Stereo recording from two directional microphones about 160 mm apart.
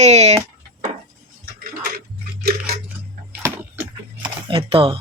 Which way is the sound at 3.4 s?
10° right (ahead or behind).